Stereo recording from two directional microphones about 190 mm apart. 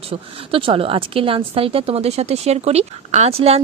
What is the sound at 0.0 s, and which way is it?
A woman's voice, 30° right (ahead or behind).